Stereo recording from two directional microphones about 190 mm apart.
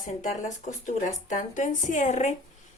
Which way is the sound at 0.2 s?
40° left (ahead or behind).